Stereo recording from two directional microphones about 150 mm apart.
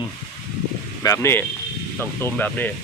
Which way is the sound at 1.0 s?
20° left (ahead or behind).